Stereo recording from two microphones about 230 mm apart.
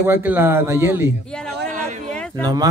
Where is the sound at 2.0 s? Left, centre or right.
Centre.